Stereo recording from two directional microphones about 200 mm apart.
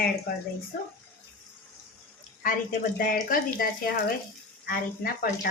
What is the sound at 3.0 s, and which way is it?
A woman's voice, 45° left (ahead or behind).